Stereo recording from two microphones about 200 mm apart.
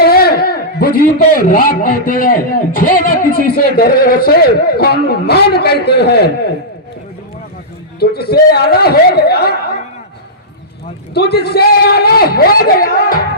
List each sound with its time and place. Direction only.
0.0 s a man's voice: 50° left (ahead or behind)
7.9 s a man's voice: 50° left (ahead or behind)
11.1 s a man's voice: 55° left (ahead or behind)